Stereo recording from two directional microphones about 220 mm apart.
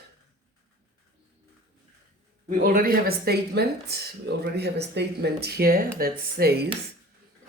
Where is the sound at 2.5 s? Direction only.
40° right (ahead or behind).